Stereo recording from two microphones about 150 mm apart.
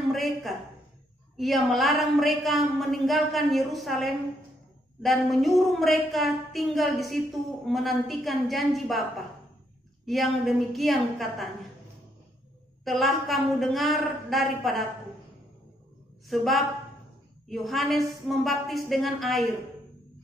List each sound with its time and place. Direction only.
0.0 s a woman's voice: centre (ahead or behind)
10.0 s a woman's voice: centre (ahead or behind)
12.8 s a woman's voice: centre (ahead or behind)
16.3 s a woman's voice: centre (ahead or behind)